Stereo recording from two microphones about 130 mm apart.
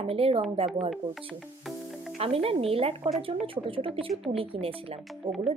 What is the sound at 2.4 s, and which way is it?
Speech, 50° right (ahead or behind).